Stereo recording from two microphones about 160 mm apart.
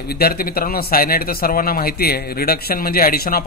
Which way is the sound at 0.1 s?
75° left (ahead or behind).